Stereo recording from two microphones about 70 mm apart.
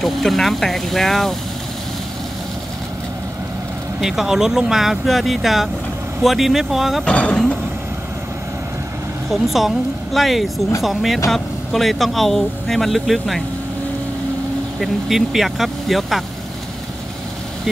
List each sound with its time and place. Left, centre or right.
0.0 s speech: centre
4.0 s speech: centre
7.1 s speech: centre
9.3 s speech: centre
14.8 s speech: centre